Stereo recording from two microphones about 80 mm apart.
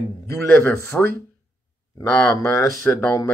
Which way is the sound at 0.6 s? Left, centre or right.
Left.